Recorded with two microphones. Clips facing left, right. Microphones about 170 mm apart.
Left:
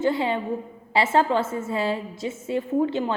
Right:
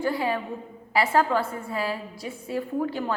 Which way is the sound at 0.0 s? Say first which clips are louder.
Left 3 dB; 25° left (ahead or behind).